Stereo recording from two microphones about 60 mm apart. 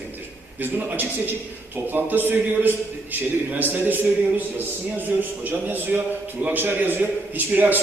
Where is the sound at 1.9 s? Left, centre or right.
Right.